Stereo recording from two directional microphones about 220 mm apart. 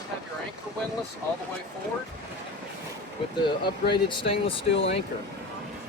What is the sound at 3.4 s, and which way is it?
Speech, 20° left (ahead or behind).